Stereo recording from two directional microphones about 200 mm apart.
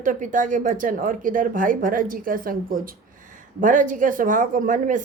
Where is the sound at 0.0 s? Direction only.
40° right (ahead or behind).